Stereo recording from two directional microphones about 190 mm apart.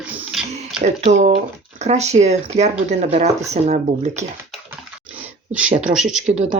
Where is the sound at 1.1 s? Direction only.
40° right (ahead or behind).